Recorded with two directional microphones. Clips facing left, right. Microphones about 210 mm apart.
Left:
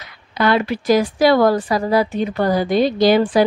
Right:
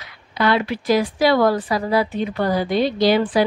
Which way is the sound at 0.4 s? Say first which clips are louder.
Left 2 dB; 45° left (ahead or behind).